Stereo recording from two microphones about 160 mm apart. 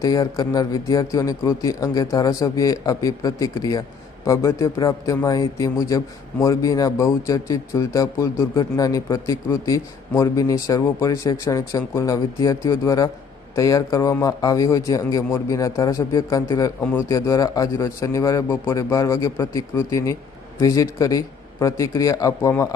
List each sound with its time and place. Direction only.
0.0 s a man's voice: 20° left (ahead or behind)